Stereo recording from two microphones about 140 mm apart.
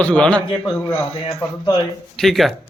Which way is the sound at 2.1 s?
Centre (ahead or behind).